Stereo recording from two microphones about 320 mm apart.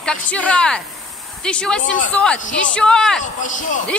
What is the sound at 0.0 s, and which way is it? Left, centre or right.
A woman's voice, centre.